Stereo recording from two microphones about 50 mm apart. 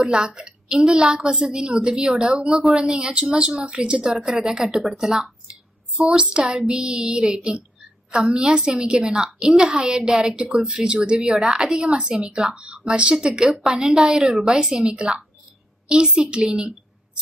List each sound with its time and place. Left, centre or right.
0.0 s a woman's voice: centre
5.9 s a woman's voice: right
6.4 s a child's voice: centre